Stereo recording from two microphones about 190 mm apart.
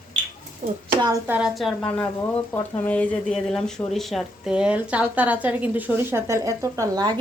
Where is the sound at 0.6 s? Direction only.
40° right (ahead or behind).